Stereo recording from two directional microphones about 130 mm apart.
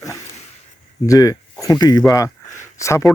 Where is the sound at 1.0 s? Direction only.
25° left (ahead or behind).